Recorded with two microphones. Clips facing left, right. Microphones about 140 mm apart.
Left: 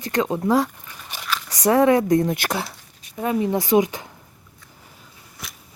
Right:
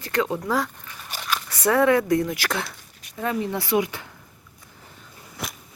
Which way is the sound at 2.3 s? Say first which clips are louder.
Left 2 dB; 15° left (ahead or behind).